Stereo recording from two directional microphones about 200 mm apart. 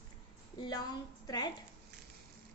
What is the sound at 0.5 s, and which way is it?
A woman's voice, 20° left (ahead or behind).